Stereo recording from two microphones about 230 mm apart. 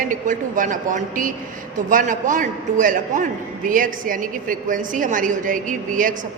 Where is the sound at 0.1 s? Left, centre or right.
Right.